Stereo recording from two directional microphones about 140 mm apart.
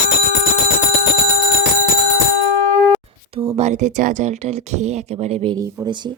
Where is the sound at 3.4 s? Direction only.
50° right (ahead or behind).